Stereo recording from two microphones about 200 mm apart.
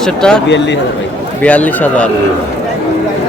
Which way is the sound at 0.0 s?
5° left (ahead or behind).